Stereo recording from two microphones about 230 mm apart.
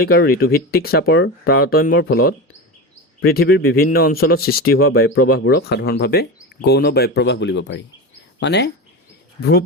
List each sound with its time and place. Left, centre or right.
0.0 s speech: left